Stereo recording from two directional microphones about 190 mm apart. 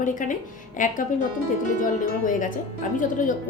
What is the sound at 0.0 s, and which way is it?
Speech, 45° left (ahead or behind).